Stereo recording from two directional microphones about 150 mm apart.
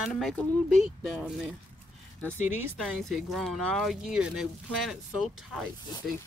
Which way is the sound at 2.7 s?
Centre (ahead or behind).